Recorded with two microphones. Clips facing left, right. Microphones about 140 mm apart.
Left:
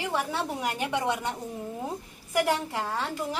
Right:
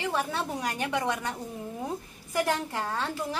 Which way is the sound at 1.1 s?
30° left (ahead or behind).